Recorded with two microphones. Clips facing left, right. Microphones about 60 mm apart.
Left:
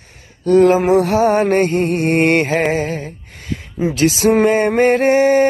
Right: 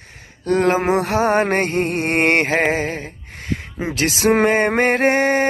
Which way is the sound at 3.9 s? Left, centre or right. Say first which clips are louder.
Left 3 dB; right.